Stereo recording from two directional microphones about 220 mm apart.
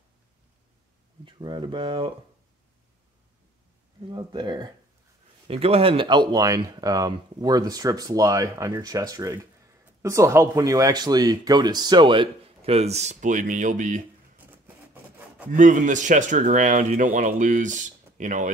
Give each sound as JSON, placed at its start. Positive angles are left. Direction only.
{"t": 1.2, "sound": "speech", "side_deg": -20}
{"t": 4.1, "sound": "speech", "side_deg": -20}
{"t": 15.5, "sound": "speech", "side_deg": -35}